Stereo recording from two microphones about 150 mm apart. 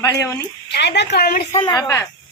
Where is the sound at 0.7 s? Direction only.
90° left.